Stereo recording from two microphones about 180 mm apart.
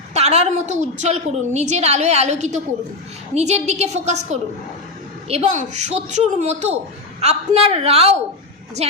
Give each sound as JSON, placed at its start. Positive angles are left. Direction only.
{"t": 0.1, "sound": "a woman's voice", "side_deg": -35}